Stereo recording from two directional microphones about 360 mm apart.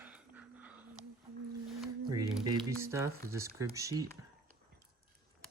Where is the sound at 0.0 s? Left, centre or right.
Centre.